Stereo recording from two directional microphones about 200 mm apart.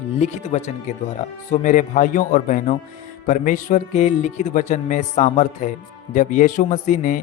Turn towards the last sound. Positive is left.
turn(degrees=40)  # may be behind; listen again after turning